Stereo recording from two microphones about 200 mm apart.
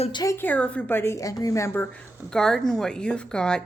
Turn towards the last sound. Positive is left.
turn(degrees=5)  # may be behind; listen again after turning